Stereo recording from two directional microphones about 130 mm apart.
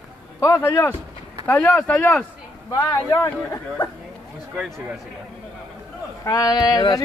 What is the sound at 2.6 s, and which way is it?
A man's voice, 25° left (ahead or behind).